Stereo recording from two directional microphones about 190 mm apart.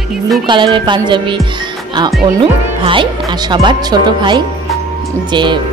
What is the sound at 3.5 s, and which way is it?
Music, 25° right (ahead or behind).